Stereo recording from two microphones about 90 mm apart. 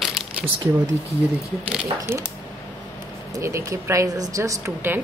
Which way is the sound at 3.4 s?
35° right (ahead or behind).